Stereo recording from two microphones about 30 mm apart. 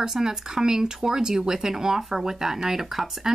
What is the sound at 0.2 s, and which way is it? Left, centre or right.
Speech, centre.